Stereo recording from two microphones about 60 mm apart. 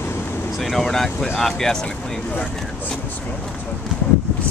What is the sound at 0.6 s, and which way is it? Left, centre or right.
Speech, centre.